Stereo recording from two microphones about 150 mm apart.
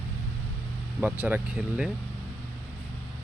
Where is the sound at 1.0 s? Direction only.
10° right (ahead or behind).